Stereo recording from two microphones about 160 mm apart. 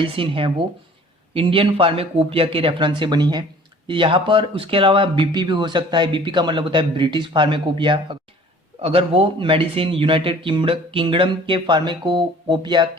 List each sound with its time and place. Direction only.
0.0 s speech: 35° right (ahead or behind)